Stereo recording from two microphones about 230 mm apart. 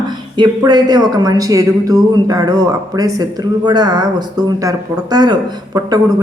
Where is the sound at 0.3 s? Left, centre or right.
Centre.